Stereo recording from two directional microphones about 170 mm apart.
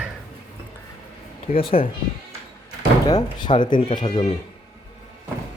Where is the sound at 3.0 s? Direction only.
25° left (ahead or behind).